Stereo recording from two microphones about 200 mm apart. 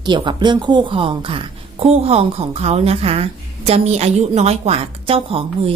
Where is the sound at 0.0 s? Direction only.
20° right (ahead or behind).